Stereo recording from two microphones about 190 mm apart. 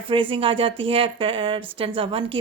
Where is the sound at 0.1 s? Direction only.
25° right (ahead or behind).